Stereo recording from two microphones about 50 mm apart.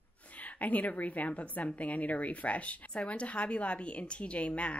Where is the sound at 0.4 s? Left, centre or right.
Left.